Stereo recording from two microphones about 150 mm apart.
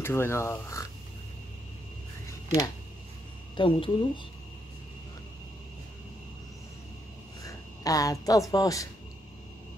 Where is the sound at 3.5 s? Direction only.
35° left (ahead or behind).